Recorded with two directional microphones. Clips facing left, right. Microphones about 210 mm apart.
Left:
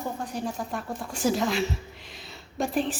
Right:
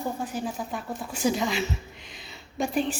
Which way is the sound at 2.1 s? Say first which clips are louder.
Left 1 dB; centre (ahead or behind).